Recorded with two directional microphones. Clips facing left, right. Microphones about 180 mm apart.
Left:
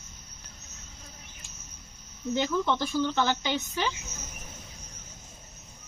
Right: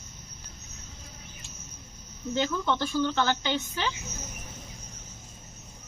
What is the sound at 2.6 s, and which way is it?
Speech, 5° left (ahead or behind).